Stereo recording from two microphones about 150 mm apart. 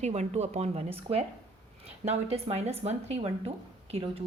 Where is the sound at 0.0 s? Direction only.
50° right (ahead or behind).